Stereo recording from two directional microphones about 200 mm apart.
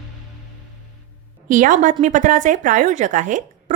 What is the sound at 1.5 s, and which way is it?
Speech, 40° right (ahead or behind).